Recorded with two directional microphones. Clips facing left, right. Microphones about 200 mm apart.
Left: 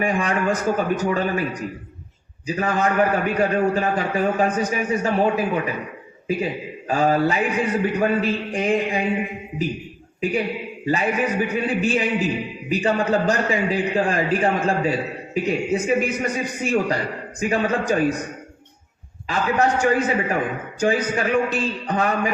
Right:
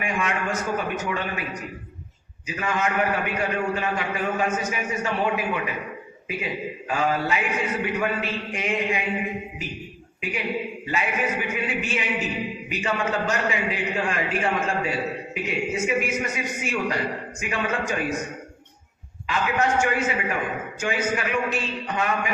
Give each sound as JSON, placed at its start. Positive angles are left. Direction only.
{"t": 0.0, "sound": "a man's voice", "side_deg": 35}
{"t": 2.5, "sound": "a man's voice", "side_deg": 35}
{"t": 10.8, "sound": "a man's voice", "side_deg": 35}
{"t": 19.3, "sound": "a man's voice", "side_deg": 35}